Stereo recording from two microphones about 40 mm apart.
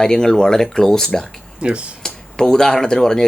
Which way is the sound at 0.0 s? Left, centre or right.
Centre.